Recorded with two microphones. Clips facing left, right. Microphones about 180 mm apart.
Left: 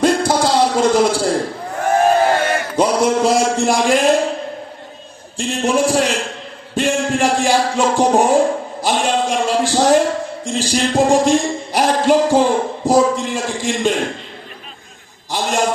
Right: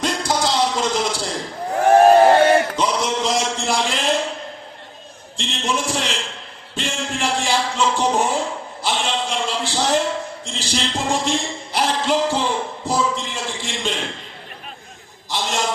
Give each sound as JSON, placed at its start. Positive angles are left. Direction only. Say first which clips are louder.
{"t": 0.0, "sound": "a sound", "louder": "left 7 dB", "side_deg": 55}
{"t": 2.7, "sound": "a man's voice", "louder": "left 7 dB", "side_deg": 55}
{"t": 5.5, "sound": "music", "louder": "left 8 dB", "side_deg": 55}
{"t": 8.0, "sound": "a man's voice", "louder": "left 7 dB", "side_deg": 55}
{"t": 12.8, "sound": "a sound", "louder": "left 9 dB", "side_deg": 40}
{"t": 13.1, "sound": "a man's voice", "louder": "left 6 dB", "side_deg": 55}
{"t": 15.3, "sound": "a man's voice", "louder": "left 5 dB", "side_deg": 45}